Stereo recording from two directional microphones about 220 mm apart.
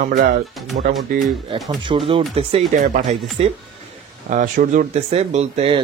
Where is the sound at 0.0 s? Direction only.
35° right (ahead or behind).